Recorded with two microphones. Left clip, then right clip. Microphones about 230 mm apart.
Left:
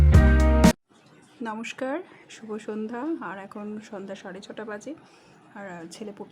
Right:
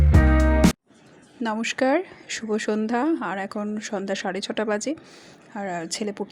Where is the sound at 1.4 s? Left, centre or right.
Centre.